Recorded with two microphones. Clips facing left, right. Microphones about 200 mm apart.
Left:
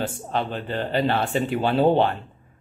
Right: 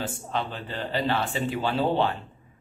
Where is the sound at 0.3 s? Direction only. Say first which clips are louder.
Left 5 dB; 55° left (ahead or behind).